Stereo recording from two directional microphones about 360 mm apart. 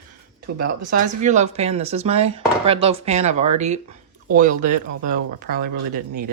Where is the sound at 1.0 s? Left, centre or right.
Centre.